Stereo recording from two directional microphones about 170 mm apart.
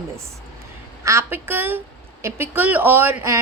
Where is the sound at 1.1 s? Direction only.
15° right (ahead or behind).